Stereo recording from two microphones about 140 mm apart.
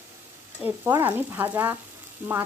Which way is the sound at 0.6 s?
15° right (ahead or behind).